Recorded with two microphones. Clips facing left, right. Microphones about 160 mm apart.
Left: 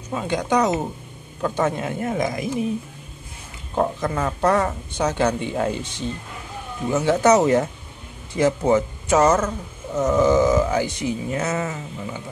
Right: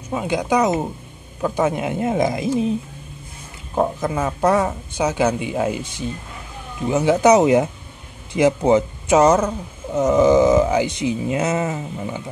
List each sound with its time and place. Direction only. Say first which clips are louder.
0.1 s speech: right 2 dB; 10° right (ahead or behind)
3.7 s speech: right 2 dB; 10° right (ahead or behind)